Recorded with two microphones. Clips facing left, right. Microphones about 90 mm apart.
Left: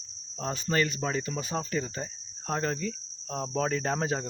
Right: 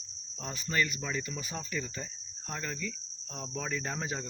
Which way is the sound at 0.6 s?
50° left (ahead or behind).